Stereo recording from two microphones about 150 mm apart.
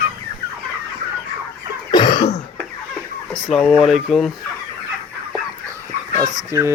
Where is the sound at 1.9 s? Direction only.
30° left (ahead or behind).